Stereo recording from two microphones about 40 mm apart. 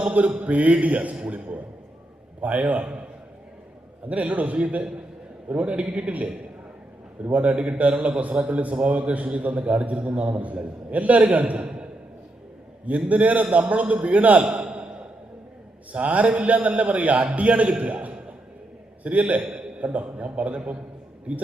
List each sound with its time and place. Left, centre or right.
0.0 s a man's voice: right
4.1 s a man's voice: right
7.3 s a man's voice: right
13.1 s a man's voice: right
14.4 s a sound: right
15.9 s a man's voice: right